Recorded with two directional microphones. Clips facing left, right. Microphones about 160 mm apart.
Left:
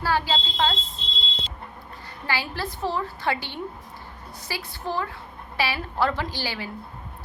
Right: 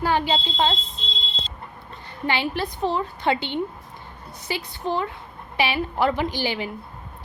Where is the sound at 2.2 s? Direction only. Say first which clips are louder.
Right 5 dB; 20° right (ahead or behind).